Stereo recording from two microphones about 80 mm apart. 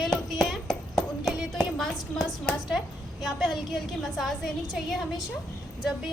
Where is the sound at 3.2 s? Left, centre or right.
Centre.